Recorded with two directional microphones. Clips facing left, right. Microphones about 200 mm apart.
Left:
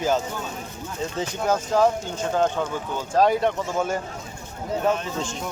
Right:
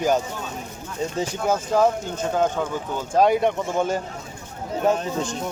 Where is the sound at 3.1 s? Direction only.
15° right (ahead or behind).